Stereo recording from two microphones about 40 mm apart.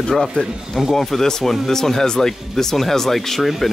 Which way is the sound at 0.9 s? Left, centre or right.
Centre.